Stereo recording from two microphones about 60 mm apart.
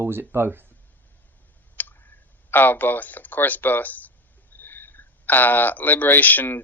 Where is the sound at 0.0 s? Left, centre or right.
Right.